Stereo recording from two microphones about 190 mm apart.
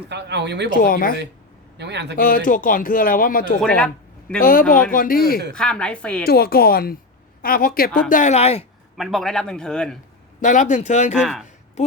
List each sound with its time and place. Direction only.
0.1 s speech: 65° right (ahead or behind)
0.7 s speech: 45° left (ahead or behind)
1.8 s speech: 65° right (ahead or behind)
2.1 s speech: 50° left (ahead or behind)
3.6 s a man's voice: 5° left (ahead or behind)
4.4 s speech: 50° left (ahead or behind)
5.5 s speech: 5° left (ahead or behind)
6.2 s a woman's voice: 55° left (ahead or behind)
8.1 s speech: 40° left (ahead or behind)
9.0 s speech: centre (ahead or behind)
10.4 s speech: 40° left (ahead or behind)
11.1 s speech: 5° right (ahead or behind)
11.8 s speech: 35° left (ahead or behind)